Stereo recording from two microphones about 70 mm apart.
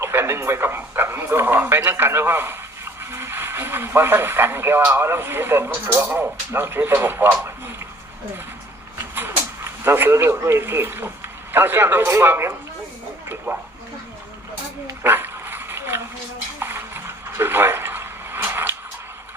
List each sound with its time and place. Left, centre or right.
0.0 s speech: right
9.1 s speech: right
15.0 s dog: right
16.6 s a sound: right